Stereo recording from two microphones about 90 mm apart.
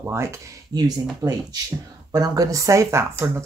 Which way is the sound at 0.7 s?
45° right (ahead or behind).